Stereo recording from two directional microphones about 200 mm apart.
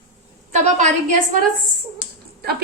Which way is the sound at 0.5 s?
40° right (ahead or behind).